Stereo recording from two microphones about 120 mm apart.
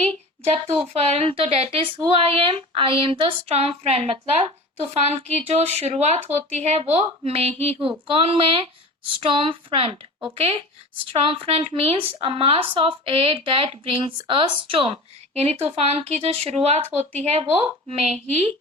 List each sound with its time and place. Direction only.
1.1 s speech: 55° right (ahead or behind)
15.4 s speech: 60° right (ahead or behind)